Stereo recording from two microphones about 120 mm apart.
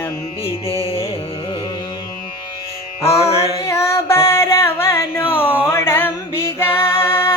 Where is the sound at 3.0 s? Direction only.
60° left (ahead or behind).